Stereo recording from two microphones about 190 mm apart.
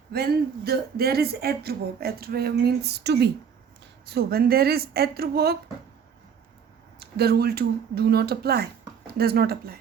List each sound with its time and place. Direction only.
0.1 s speech: 55° right (ahead or behind)
7.0 s speech: 55° right (ahead or behind)